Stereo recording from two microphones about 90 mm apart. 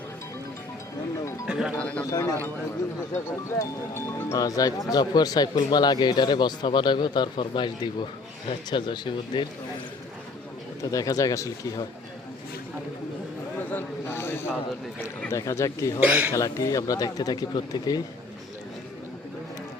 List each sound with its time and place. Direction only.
1.5 s speech: 10° right (ahead or behind)
2.0 s speech: 40° left (ahead or behind)
3.6 s speech: 25° left (ahead or behind); by 9.5 s 60° left (ahead or behind)
10.9 s speech: 40° left (ahead or behind)
13.7 s speech: 25° left (ahead or behind)
16.0 s speech: 25° right (ahead or behind)
16.3 s speech: 35° left (ahead or behind)